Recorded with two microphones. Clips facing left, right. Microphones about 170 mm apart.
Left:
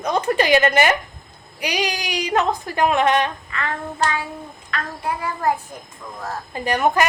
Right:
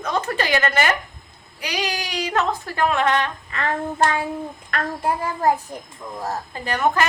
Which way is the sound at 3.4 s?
40° right (ahead or behind).